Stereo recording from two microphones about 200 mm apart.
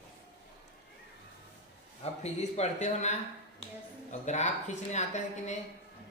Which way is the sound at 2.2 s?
35° left (ahead or behind).